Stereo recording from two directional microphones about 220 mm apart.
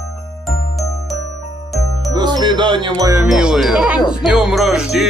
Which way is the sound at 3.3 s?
Centre (ahead or behind).